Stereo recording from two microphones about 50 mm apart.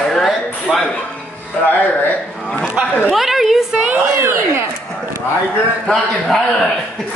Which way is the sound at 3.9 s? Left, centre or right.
Right.